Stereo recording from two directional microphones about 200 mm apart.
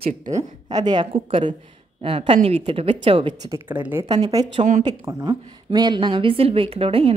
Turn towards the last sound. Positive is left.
turn(degrees=-30)  # may be behind; listen again after turning